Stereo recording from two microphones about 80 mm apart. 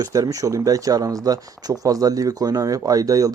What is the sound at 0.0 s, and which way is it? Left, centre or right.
Speech, right.